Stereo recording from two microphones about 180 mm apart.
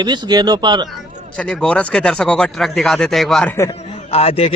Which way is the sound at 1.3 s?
5° left (ahead or behind).